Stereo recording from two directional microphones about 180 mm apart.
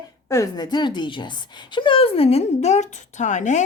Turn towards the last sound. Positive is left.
turn(degrees=40)  # may be behind; listen again after turning